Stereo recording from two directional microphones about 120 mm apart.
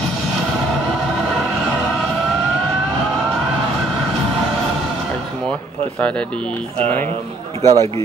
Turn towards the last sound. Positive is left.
turn(degrees=-75)  # may be behind; listen again after turning